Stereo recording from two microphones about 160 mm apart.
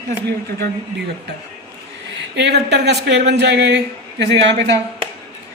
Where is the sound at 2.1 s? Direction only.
90° right.